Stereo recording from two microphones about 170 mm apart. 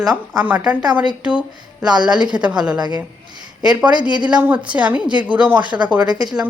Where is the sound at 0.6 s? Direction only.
25° right (ahead or behind).